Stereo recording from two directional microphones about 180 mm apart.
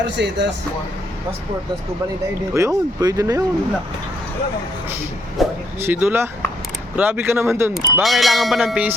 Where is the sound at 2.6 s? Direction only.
20° right (ahead or behind).